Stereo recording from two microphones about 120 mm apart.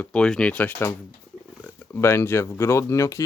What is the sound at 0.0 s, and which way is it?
Speech, 5° left (ahead or behind).